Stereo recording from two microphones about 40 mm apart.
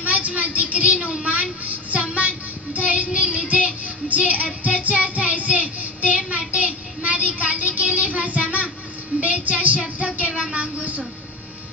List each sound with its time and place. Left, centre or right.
0.0 s speech: right
1.2 s child singing: right
9.2 s a woman's voice: right
9.8 s a sound: right
10.5 s a woman's voice: right